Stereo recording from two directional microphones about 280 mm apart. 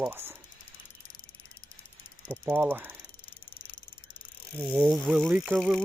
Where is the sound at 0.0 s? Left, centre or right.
Centre.